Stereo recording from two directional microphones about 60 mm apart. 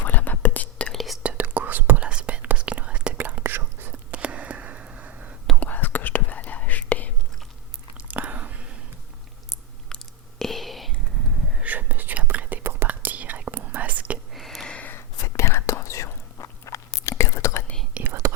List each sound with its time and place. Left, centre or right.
0.0 s whispering: left
0.9 s whispering: centre
1.2 s whispering: right
3.2 s whispering: right
4.2 s a sound: centre
5.5 s whispering: left
7.9 s a sound: right
9.9 s whispering: centre
11.6 s whispering: right
14.3 s a sound: centre
15.2 s whispering: left
18.0 s whispering: right